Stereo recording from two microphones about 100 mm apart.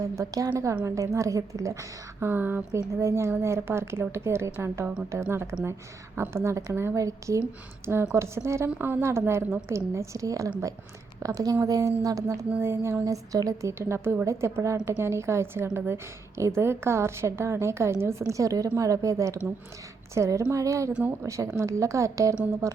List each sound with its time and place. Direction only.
0.2 s a woman's voice: 30° right (ahead or behind)
2.2 s a woman's voice: 20° right (ahead or behind); by 12.5 s 35° right (ahead or behind)
12.5 s a woman's voice: 25° right (ahead or behind)